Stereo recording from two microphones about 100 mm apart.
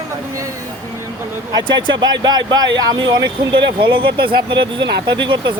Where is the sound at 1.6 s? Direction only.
50° right (ahead or behind).